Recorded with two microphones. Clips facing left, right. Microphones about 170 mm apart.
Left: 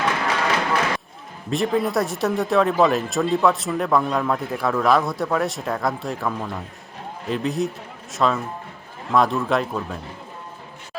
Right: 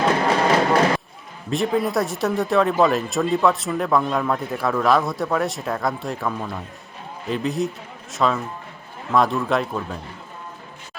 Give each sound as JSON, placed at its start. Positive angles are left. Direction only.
{"t": 0.0, "sound": "music", "side_deg": -35}
{"t": 1.5, "sound": "speech", "side_deg": 0}